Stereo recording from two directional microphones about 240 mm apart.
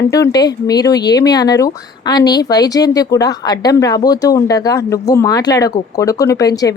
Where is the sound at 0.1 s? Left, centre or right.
Centre.